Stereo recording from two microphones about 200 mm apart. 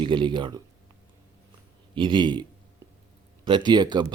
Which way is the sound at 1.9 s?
25° right (ahead or behind).